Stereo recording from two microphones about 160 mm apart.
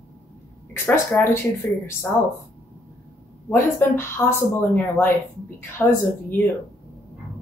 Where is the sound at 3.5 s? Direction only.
15° left (ahead or behind).